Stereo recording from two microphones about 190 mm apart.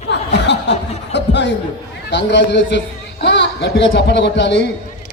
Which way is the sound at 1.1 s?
65° left (ahead or behind).